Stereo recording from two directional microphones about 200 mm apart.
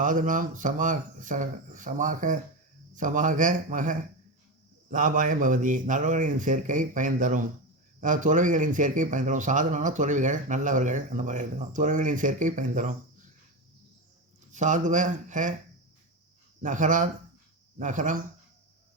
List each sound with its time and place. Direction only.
0.0 s a man's voice: 40° right (ahead or behind)
14.5 s a man's voice: 40° right (ahead or behind)
16.6 s a man's voice: 40° right (ahead or behind)